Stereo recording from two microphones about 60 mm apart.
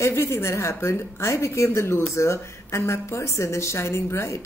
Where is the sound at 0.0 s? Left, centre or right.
Left.